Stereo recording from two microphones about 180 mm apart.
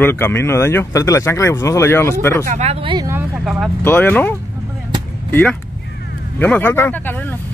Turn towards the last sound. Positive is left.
turn(degrees=10)  # may be behind; listen again after turning